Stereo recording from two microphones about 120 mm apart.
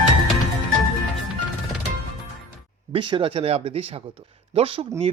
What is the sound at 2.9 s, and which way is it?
Speech, 45° right (ahead or behind).